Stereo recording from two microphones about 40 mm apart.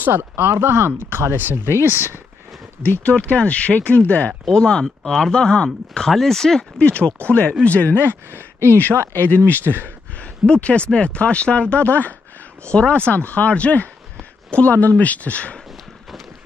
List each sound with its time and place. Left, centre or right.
0.1 s speech: right
3.1 s speech: left
4.3 s speech: centre
6.8 s speech: left
8.1 s speech: right
9.1 s speech: left
9.7 s speech: right
10.6 s speech: left
12.6 s speech: left
13.1 s speech: left